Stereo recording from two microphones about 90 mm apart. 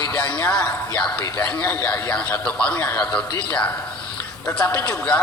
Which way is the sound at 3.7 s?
25° left (ahead or behind).